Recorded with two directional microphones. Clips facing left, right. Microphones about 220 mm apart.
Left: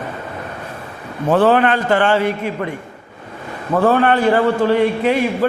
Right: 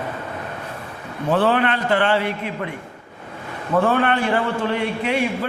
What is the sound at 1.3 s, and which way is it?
A man's voice, 45° left (ahead or behind).